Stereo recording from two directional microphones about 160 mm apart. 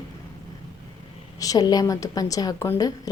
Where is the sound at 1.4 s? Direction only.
25° left (ahead or behind).